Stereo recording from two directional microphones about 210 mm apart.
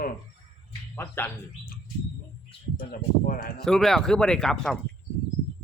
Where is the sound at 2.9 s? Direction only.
45° left (ahead or behind).